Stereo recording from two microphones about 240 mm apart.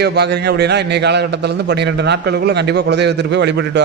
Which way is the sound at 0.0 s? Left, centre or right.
Right.